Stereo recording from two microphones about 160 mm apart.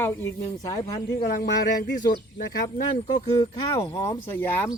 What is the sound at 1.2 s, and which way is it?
Speech, 75° left (ahead or behind).